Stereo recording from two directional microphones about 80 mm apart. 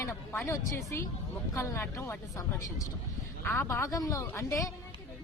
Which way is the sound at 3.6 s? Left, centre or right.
Left.